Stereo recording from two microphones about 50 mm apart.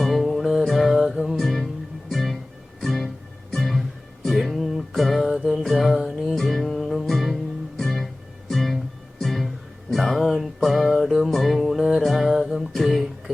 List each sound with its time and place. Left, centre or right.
0.0 s music: centre
5.3 s music: centre
5.5 s music: centre
11.8 s music: centre
12.0 s music: centre